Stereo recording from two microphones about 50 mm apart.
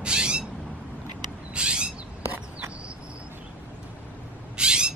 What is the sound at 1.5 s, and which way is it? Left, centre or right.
Owl, centre.